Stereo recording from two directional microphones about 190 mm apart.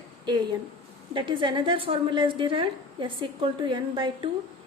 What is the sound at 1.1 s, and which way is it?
A woman's voice, 25° right (ahead or behind).